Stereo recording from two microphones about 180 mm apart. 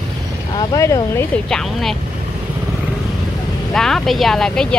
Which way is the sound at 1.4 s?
5° left (ahead or behind).